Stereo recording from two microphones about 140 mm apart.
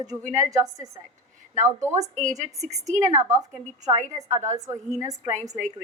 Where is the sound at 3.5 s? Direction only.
55° right (ahead or behind).